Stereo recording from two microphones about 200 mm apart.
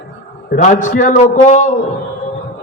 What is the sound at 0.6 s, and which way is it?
A man's voice, 40° left (ahead or behind).